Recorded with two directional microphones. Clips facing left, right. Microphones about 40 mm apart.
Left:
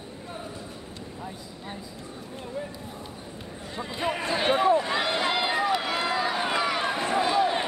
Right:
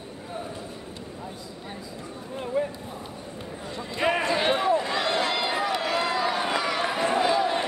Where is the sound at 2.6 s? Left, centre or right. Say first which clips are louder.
Right 9 dB; right.